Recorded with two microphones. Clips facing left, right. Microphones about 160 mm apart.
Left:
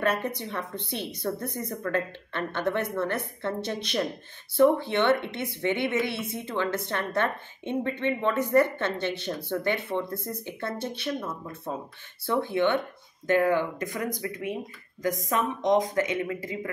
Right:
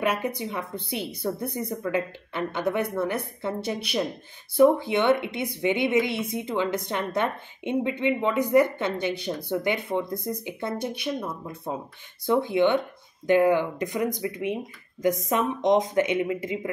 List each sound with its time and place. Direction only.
0.0 s speech: 10° right (ahead or behind)